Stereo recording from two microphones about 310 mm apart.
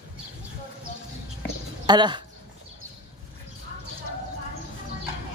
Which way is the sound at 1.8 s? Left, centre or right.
Centre.